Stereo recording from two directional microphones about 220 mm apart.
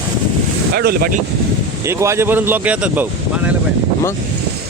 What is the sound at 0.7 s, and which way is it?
Speech, 45° right (ahead or behind).